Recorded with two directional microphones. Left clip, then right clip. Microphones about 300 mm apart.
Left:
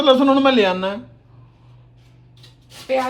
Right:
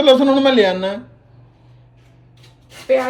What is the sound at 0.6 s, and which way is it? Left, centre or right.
Speech, left.